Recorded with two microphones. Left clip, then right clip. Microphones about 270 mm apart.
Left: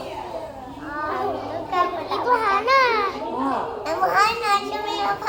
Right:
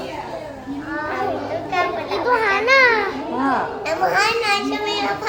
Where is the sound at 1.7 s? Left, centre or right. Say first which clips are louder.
Right 1 dB; right.